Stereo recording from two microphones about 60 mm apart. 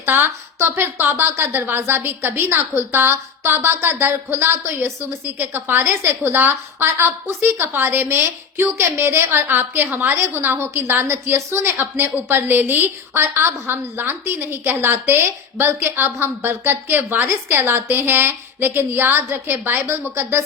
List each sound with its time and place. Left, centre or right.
0.0 s a woman's voice: right